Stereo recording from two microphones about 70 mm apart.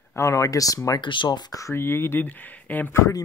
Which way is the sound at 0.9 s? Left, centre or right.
Left.